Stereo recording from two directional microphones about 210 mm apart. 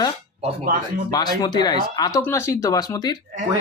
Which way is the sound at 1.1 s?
20° left (ahead or behind).